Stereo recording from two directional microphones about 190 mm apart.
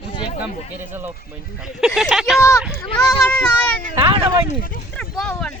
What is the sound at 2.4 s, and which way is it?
Speech, 15° left (ahead or behind).